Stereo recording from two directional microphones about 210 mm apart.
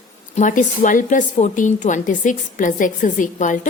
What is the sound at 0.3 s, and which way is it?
A woman's voice, 35° left (ahead or behind).